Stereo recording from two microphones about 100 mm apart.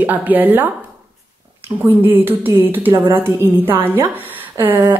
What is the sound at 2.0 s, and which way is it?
Speech, 20° right (ahead or behind).